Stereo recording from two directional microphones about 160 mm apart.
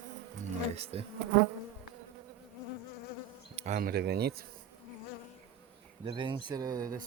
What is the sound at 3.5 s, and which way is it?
Speech, 50° right (ahead or behind).